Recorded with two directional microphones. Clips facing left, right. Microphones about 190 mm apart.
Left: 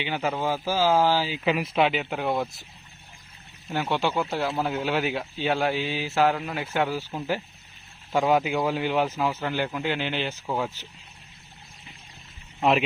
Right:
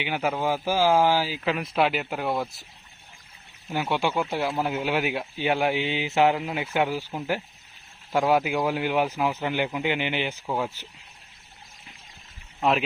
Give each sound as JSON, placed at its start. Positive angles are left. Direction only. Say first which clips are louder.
{"t": 0.0, "sound": "speech", "louder": "right 1 dB", "side_deg": -10}
{"t": 1.5, "sound": "speech", "louder": "left 2 dB", "side_deg": 0}
{"t": 3.7, "sound": "speech", "louder": "even", "side_deg": -10}
{"t": 12.5, "sound": "speech", "louder": "left 2 dB", "side_deg": 0}